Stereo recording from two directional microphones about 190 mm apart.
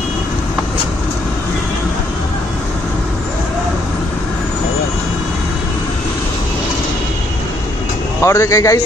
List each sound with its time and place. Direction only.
8.2 s speech: 15° left (ahead or behind)